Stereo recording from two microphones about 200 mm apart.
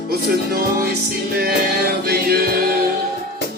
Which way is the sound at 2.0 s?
55° right (ahead or behind).